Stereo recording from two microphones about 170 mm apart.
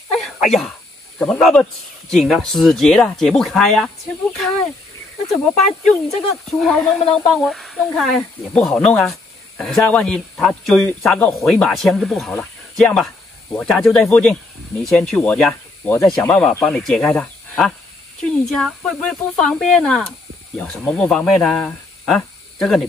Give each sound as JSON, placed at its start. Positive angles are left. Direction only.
{"t": 0.1, "sound": "speech", "side_deg": 0}
{"t": 6.4, "sound": "speech", "side_deg": 0}